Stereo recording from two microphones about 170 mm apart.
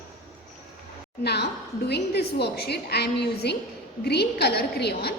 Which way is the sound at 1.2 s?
75° left (ahead or behind).